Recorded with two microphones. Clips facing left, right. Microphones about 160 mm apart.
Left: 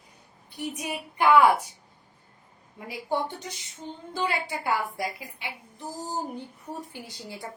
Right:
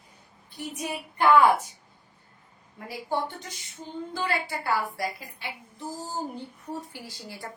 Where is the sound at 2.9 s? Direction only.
15° left (ahead or behind).